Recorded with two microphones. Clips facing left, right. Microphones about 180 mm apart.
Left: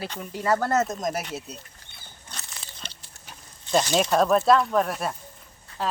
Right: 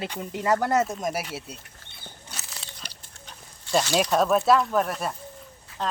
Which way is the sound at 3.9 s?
Centre (ahead or behind).